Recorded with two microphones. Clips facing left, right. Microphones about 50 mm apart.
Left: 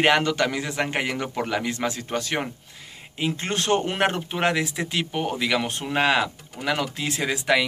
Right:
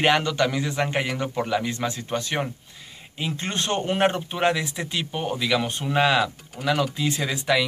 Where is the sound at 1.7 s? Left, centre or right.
Left.